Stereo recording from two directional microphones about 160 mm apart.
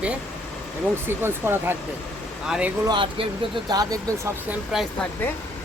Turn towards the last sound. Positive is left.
turn(degrees=0)  # may be behind; listen again after turning